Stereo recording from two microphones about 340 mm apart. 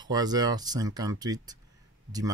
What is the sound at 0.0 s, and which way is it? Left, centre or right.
Speech, centre.